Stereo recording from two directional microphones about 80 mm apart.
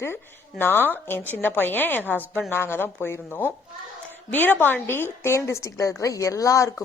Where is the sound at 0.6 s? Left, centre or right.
Left.